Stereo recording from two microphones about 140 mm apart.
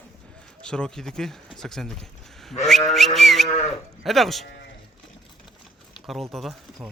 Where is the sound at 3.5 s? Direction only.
50° left (ahead or behind).